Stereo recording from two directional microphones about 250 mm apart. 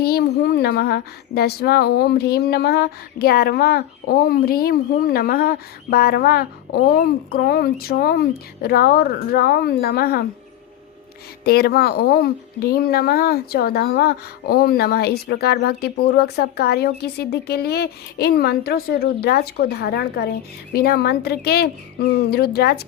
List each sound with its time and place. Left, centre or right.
0.0 s speech: left
11.4 s speech: left